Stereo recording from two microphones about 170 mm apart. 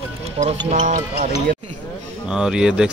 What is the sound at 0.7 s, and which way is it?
Speech, 50° right (ahead or behind).